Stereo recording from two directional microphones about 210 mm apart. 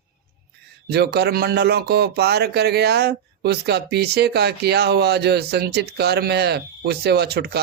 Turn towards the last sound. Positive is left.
turn(degrees=-50)  # may be behind; listen again after turning